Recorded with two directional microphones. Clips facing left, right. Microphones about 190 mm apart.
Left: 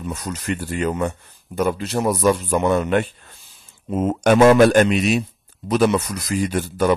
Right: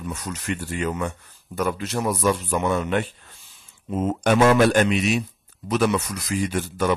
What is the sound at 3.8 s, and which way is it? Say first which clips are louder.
A man's voice: left 4 dB; 55° left (ahead or behind).